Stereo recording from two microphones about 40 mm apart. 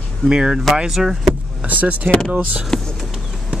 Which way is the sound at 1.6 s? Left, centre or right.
Right.